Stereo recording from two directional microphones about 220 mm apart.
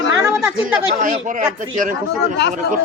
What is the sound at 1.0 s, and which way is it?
Speech, 35° right (ahead or behind).